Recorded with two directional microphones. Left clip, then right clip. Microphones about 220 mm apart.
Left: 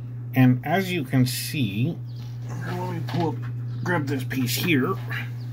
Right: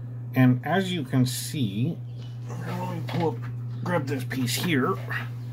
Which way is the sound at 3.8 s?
Centre (ahead or behind).